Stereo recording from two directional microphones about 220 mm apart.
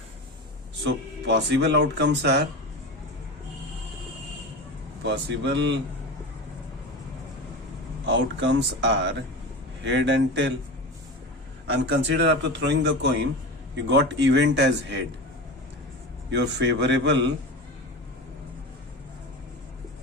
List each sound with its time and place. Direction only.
0.9 s speech: 50° right (ahead or behind)
5.0 s speech: 55° right (ahead or behind)
8.0 s speech: 55° right (ahead or behind)
11.7 s speech: 50° right (ahead or behind)
16.3 s speech: 50° right (ahead or behind)